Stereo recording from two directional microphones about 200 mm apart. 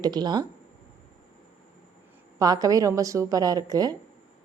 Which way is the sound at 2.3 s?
20° right (ahead or behind).